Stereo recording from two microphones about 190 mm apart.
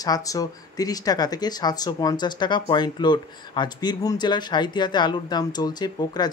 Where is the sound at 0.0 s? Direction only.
20° left (ahead or behind).